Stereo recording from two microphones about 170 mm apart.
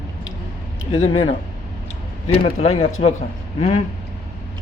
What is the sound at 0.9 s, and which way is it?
Speech, 30° left (ahead or behind).